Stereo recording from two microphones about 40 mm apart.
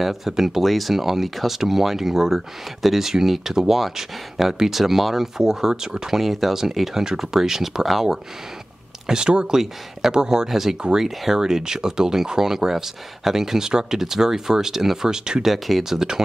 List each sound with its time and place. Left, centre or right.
0.0 s speech: centre
9.1 s speech: right
15.4 s speech: centre